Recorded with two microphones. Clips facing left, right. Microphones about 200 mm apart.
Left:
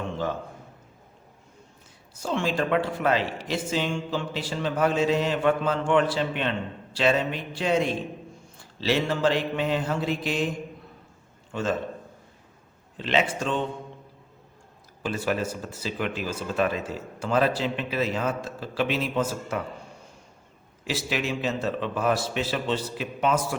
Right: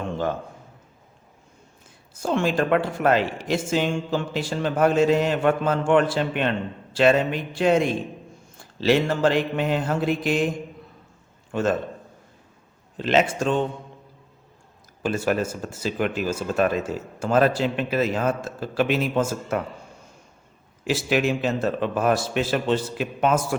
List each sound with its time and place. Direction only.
2.1 s speech: 50° right (ahead or behind)
8.8 s speech: 50° right (ahead or behind)
11.5 s speech: 50° right (ahead or behind)
13.0 s speech: 45° right (ahead or behind)
15.0 s speech: 45° right (ahead or behind)
20.8 s speech: 50° right (ahead or behind)